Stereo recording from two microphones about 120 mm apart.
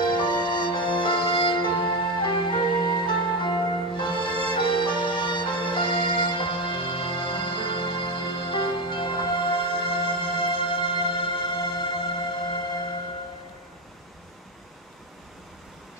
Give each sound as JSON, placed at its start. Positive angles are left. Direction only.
{"t": 0.0, "sound": "music", "side_deg": 40}